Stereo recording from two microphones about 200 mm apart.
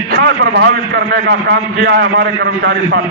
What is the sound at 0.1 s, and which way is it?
A man's voice, 55° right (ahead or behind).